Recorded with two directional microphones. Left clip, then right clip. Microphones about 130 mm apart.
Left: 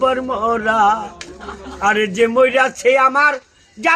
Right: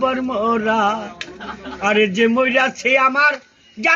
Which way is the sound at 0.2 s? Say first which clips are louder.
Left 1 dB; 35° left (ahead or behind).